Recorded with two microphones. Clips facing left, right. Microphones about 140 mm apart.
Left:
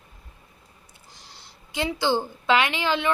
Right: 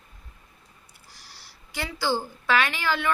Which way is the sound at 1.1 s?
20° left (ahead or behind).